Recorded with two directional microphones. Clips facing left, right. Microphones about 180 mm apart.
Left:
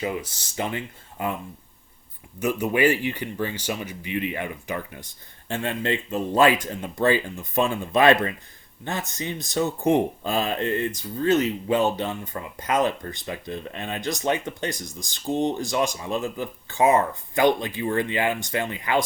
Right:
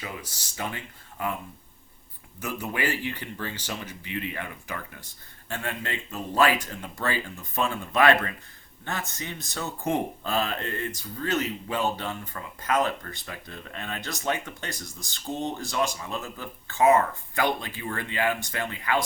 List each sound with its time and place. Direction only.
0.0 s speech: 25° left (ahead or behind)
2.4 s speech: 15° left (ahead or behind)